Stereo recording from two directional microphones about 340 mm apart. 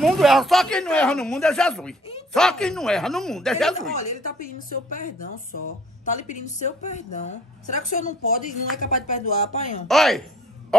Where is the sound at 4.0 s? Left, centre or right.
Left.